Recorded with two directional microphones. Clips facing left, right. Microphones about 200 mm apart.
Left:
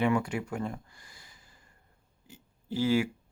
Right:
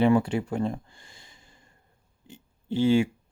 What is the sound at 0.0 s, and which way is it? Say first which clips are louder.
Speech: right 6 dB; 30° right (ahead or behind).